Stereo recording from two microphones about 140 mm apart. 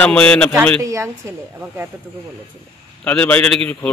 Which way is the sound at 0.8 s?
20° right (ahead or behind).